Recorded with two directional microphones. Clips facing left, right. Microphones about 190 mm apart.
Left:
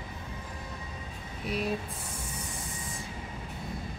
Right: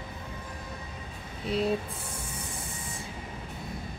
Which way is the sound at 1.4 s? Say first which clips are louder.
Right 4 dB; 25° right (ahead or behind).